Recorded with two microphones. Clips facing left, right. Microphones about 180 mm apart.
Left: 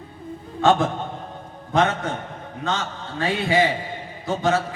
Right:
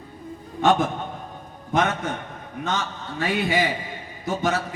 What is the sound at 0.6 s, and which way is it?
A man's voice, 25° left (ahead or behind).